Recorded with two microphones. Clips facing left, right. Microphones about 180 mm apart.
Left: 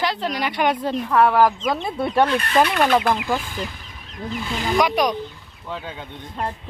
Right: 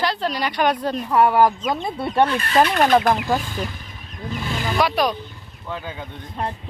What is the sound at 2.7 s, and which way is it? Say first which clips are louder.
Speech: right 2 dB; 40° right (ahead or behind).